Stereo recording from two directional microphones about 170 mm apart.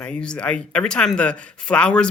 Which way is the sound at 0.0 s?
5° left (ahead or behind).